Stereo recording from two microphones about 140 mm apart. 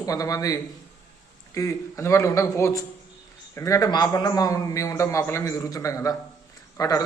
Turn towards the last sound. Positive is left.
turn(degrees=25)  # may be behind; listen again after turning